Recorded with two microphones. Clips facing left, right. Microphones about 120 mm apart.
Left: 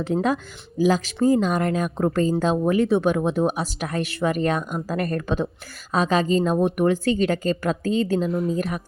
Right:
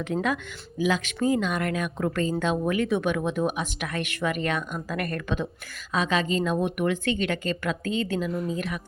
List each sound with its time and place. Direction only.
0.0 s speech: 35° left (ahead or behind)
8.3 s a woman's voice: centre (ahead or behind)
8.5 s speech: 40° left (ahead or behind)